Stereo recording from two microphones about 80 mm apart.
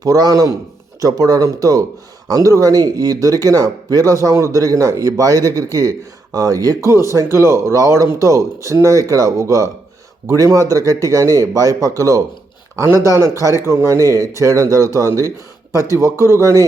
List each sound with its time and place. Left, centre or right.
0.0 s speech: right